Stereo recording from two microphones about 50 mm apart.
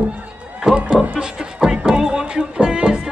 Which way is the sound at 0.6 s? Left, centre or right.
Centre.